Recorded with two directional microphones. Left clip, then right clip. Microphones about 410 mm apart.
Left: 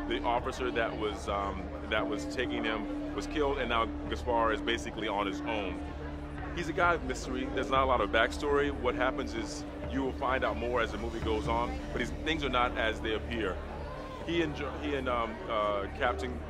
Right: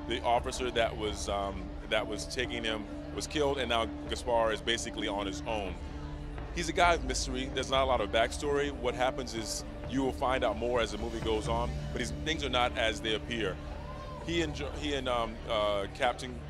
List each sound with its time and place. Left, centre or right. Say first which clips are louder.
0.1 s a man's voice: right 2 dB; right
9.9 s speech: right 1 dB; right